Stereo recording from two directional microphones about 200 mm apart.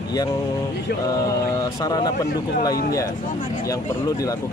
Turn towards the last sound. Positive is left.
turn(degrees=15)  # may be behind; listen again after turning